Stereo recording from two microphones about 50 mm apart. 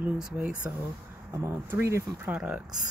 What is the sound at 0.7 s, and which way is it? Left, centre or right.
Speech, right.